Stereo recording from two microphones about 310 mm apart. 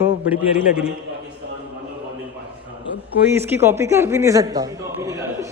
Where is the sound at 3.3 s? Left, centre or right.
Centre.